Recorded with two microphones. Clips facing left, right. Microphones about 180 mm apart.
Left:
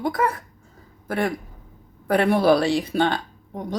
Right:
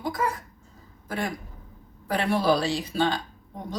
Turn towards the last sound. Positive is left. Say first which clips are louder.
# left 6 dB
turn(degrees=60)  # may be behind; listen again after turning